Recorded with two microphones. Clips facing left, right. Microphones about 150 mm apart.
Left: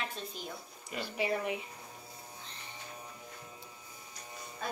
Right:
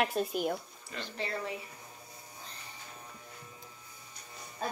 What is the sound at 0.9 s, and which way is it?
Speech, 15° left (ahead or behind).